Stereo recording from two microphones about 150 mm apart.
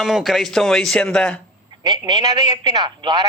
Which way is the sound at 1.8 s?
30° right (ahead or behind).